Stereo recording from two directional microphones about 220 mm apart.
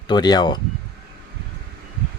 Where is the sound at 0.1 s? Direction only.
20° left (ahead or behind).